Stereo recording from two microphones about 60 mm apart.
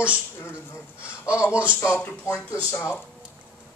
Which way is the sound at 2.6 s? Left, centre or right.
Left.